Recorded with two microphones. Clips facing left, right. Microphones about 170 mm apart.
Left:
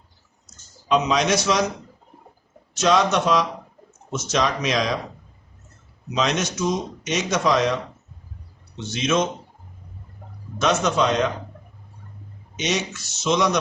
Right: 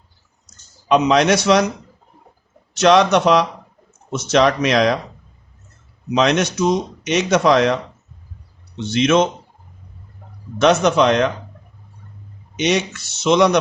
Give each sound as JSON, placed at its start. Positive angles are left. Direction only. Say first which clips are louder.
{"t": 0.9, "sound": "speech", "louder": "right 6 dB", "side_deg": -65}
{"t": 2.7, "sound": "a man's voice", "louder": "right 6 dB", "side_deg": -70}
{"t": 6.1, "sound": "speech", "louder": "right 6 dB", "side_deg": -65}
{"t": 8.8, "sound": "a man's voice", "louder": "right 7 dB", "side_deg": -65}
{"t": 10.6, "sound": "a man's voice", "louder": "right 6 dB", "side_deg": -70}
{"t": 12.5, "sound": "speech", "louder": "right 6 dB", "side_deg": -60}